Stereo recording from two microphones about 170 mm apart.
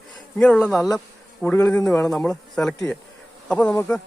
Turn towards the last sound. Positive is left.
turn(degrees=10)  # may be behind; listen again after turning